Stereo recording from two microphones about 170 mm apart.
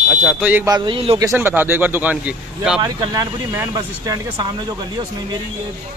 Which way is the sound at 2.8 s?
25° right (ahead or behind).